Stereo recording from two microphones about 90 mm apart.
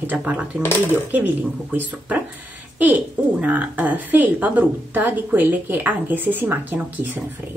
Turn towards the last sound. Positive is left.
turn(degrees=-20)  # may be behind; listen again after turning